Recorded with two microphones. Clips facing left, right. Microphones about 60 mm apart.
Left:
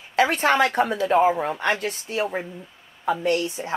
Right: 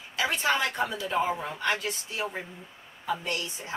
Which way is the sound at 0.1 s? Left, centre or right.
Left.